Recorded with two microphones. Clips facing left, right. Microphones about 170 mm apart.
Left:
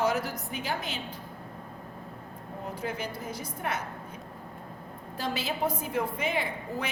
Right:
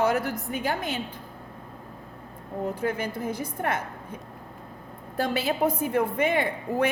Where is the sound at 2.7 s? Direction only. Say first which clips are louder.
Right 6 dB; 55° right (ahead or behind).